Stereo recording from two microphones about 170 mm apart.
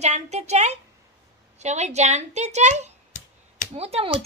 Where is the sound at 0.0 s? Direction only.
40° right (ahead or behind).